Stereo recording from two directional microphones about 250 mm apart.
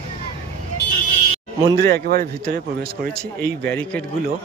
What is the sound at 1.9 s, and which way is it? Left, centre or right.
Speech, right.